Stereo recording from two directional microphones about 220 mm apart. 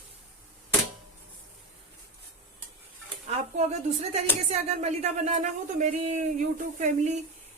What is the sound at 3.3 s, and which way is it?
Dishes, 30° right (ahead or behind).